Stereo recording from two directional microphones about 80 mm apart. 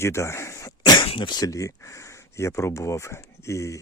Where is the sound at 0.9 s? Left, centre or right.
Left.